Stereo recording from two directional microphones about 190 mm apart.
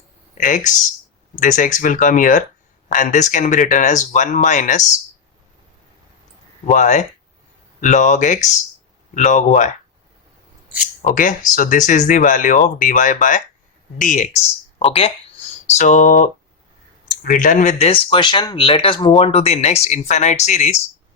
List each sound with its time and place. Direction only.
0.3 s speech: 40° left (ahead or behind)
6.7 s speech: 40° left (ahead or behind)
11.0 s speech: 45° left (ahead or behind)